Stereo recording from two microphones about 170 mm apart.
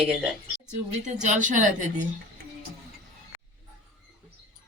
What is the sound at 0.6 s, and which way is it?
Speech, 45° right (ahead or behind).